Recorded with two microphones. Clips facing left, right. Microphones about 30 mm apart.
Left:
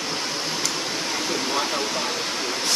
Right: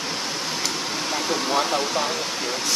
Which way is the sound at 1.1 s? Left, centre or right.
Centre.